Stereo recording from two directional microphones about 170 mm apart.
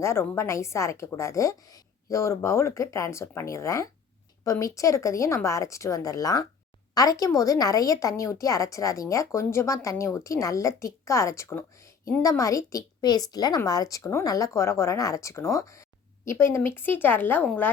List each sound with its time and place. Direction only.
0.0 s a woman's voice: 15° left (ahead or behind)